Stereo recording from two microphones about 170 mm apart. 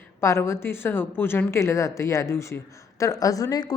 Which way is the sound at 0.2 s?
15° left (ahead or behind).